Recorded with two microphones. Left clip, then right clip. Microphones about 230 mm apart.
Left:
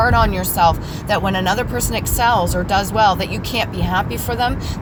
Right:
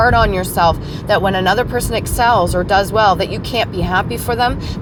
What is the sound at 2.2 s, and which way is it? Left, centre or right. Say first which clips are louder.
Speech: right 3 dB; right.